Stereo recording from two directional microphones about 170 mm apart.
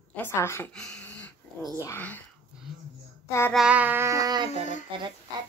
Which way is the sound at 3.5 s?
5° right (ahead or behind).